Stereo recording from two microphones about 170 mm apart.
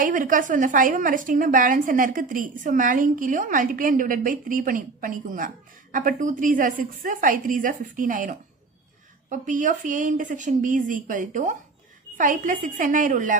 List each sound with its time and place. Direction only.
0.0 s a woman's voice: 50° right (ahead or behind)